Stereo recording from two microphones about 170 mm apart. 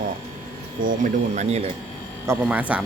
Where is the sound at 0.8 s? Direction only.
50° right (ahead or behind).